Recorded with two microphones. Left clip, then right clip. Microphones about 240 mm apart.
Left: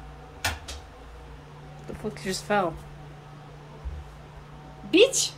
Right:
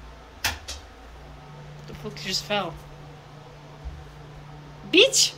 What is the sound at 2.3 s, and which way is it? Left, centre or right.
Speech, centre.